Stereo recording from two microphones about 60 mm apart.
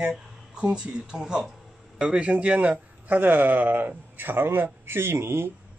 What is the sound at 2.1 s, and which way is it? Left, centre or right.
A man's voice, right.